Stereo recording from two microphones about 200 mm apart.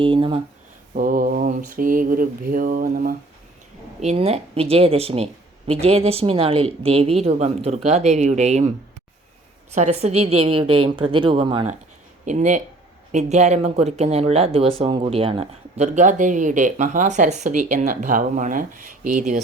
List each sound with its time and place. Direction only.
0.0 s speech: 25° right (ahead or behind)
0.9 s mantra: 45° right (ahead or behind)
4.0 s speech: 30° right (ahead or behind)
9.7 s speech: 35° right (ahead or behind)
12.2 s speech: 35° right (ahead or behind)